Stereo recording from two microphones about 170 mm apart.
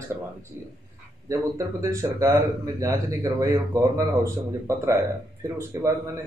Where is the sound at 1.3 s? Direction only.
20° right (ahead or behind).